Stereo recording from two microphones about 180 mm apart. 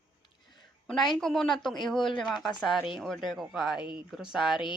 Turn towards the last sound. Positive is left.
turn(degrees=0)  # may be behind; listen again after turning